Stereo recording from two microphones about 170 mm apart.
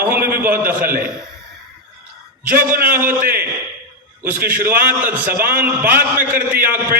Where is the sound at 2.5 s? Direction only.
55° right (ahead or behind).